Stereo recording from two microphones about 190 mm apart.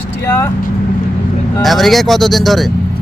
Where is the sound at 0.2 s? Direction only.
15° left (ahead or behind).